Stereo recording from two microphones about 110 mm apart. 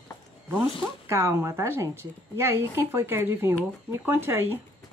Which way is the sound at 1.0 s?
25° right (ahead or behind).